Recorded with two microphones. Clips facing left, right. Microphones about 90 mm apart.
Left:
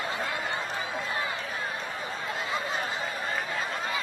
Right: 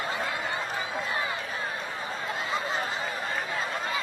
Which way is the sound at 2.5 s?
25° right (ahead or behind).